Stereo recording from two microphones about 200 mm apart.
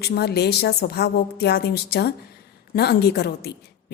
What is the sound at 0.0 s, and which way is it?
A woman's voice, 55° left (ahead or behind).